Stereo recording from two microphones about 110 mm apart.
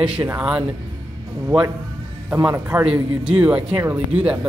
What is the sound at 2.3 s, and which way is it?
Speech, 15° right (ahead or behind).